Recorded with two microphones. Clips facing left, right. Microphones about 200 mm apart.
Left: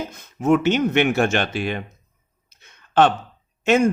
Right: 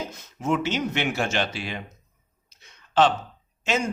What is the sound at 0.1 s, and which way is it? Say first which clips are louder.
Speech: left 10 dB; 55° left (ahead or behind).